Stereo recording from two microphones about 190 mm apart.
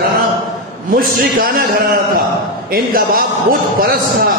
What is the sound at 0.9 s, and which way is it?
A man's voice, 50° right (ahead or behind).